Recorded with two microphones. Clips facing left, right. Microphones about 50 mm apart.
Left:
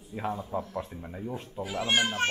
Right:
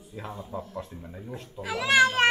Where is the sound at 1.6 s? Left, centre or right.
Right.